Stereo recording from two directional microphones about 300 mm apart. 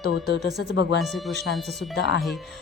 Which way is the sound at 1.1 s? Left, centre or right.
Centre.